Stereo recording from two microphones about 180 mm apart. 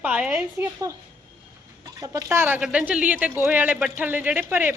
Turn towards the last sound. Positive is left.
turn(degrees=-10)  # may be behind; listen again after turning